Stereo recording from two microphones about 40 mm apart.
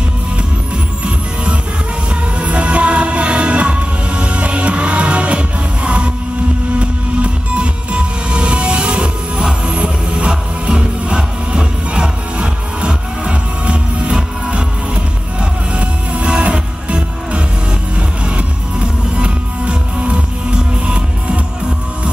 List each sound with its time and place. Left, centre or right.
1.0 s music: right
15.7 s music: right